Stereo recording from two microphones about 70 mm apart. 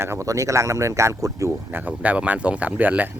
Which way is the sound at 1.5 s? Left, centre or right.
Right.